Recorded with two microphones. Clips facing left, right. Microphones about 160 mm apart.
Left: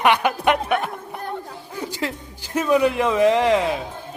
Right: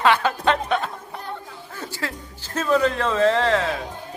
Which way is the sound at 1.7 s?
15° left (ahead or behind).